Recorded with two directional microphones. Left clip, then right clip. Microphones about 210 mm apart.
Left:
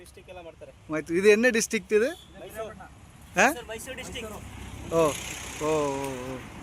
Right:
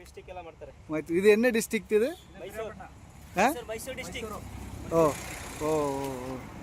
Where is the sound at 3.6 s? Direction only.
65° right (ahead or behind).